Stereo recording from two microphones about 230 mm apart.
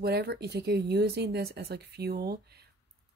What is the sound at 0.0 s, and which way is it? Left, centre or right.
Speech, right.